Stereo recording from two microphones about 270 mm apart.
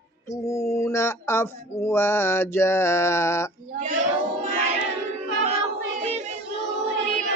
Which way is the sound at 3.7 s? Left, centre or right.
Right.